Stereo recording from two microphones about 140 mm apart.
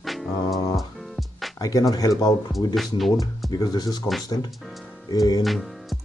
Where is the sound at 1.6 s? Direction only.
25° left (ahead or behind).